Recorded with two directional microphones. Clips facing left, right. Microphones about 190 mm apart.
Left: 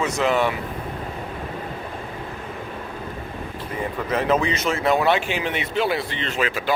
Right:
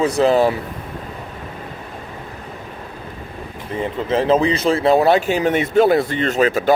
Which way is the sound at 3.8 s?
25° right (ahead or behind).